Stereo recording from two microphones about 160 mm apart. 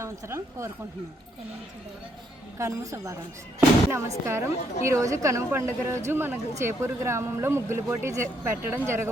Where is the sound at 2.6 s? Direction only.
20° right (ahead or behind).